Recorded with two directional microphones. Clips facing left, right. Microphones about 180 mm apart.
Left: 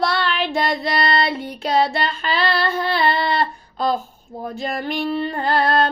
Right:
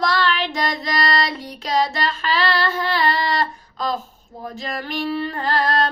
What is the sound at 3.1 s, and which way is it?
Speech, 30° left (ahead or behind).